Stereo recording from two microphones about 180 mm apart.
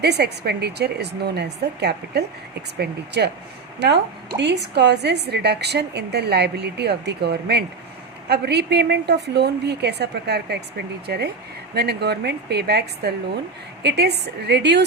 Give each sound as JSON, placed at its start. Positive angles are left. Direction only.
{"t": 0.0, "sound": "a woman's voice", "side_deg": -65}